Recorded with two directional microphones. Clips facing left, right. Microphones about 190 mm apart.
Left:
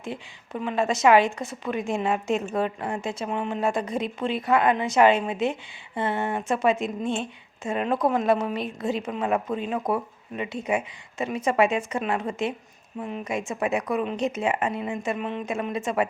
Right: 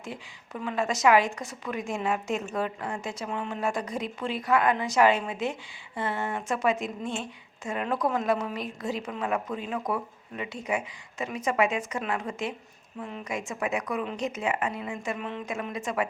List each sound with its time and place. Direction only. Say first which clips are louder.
0.0 s a woman's voice: left 5 dB; 25° left (ahead or behind)